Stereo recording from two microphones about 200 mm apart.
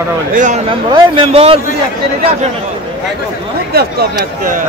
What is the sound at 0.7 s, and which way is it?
Speech, 25° right (ahead or behind).